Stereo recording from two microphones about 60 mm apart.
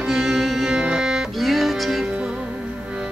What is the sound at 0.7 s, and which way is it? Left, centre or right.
Music, centre.